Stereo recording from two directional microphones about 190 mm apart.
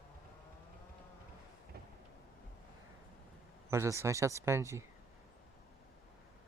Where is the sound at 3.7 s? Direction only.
15° right (ahead or behind).